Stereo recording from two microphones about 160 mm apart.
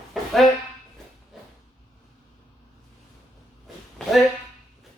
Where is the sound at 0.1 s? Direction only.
Centre (ahead or behind).